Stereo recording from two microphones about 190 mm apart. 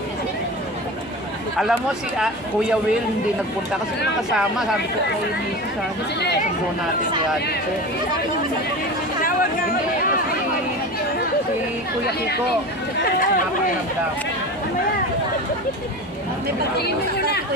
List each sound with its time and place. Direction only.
1.6 s speech: 5° right (ahead or behind)
4.4 s speech: 5° right (ahead or behind)
9.2 s chatter: 50° left (ahead or behind)
13.0 s speech: 50° left (ahead or behind)
16.7 s speech: 60° left (ahead or behind)